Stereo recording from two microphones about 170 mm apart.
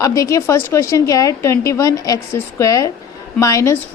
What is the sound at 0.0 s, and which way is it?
A woman's voice, 20° left (ahead or behind).